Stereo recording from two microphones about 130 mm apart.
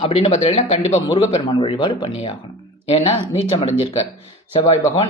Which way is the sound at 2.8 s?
55° left (ahead or behind).